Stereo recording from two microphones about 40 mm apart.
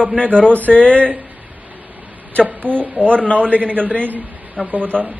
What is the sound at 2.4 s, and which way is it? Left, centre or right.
Speech, right.